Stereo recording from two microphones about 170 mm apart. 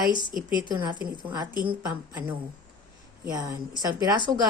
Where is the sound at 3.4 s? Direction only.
20° right (ahead or behind).